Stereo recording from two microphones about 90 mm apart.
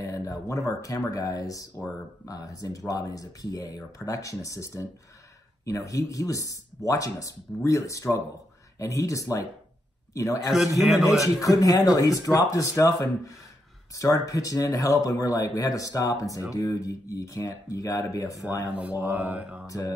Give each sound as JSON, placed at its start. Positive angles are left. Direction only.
{"t": 0.0, "sound": "speech", "side_deg": 40}
{"t": 10.8, "sound": "a man's voice", "side_deg": -5}
{"t": 11.4, "sound": "speech", "side_deg": 40}
{"t": 18.8, "sound": "speech", "side_deg": -15}
{"t": 19.6, "sound": "speech", "side_deg": 35}